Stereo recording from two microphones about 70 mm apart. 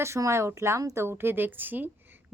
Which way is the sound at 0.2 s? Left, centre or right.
Right.